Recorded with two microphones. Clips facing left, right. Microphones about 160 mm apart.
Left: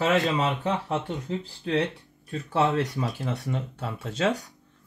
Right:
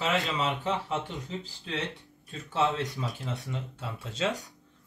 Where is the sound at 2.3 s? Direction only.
65° left (ahead or behind).